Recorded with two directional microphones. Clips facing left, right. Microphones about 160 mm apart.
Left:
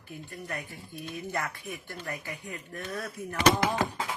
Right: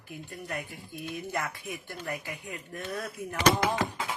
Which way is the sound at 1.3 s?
15° right (ahead or behind).